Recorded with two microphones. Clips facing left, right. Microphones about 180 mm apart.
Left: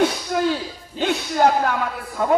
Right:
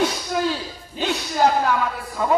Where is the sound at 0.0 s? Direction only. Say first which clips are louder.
Left 2 dB; 55° left (ahead or behind).